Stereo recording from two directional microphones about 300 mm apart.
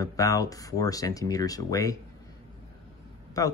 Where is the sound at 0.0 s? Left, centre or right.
Centre.